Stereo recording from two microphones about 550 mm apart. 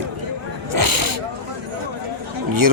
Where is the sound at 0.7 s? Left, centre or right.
Right.